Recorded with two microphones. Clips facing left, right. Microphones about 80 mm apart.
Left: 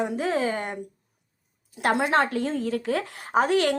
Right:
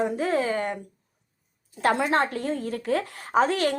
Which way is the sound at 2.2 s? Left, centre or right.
Left.